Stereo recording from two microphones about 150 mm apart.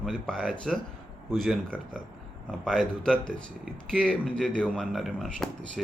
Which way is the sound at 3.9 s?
5° left (ahead or behind).